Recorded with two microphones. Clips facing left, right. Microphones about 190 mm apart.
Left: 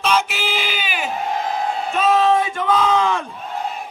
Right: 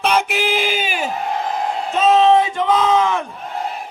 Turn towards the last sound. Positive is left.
turn(degrees=-20)  # may be behind; listen again after turning